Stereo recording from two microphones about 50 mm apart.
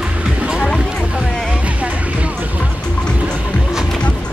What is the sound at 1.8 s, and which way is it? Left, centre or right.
Music, right.